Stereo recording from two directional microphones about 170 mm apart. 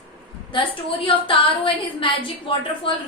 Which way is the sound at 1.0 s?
30° left (ahead or behind).